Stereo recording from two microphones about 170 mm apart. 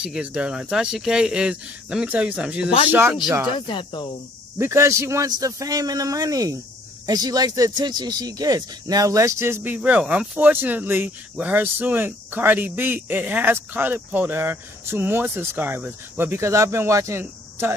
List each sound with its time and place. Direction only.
0.0 s speech: 5° right (ahead or behind)
3.5 s speech: 30° left (ahead or behind)
4.6 s a man's voice: 15° right (ahead or behind)